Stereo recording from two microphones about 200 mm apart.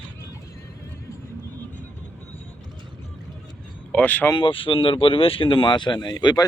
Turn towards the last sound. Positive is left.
turn(degrees=20)  # may be behind; listen again after turning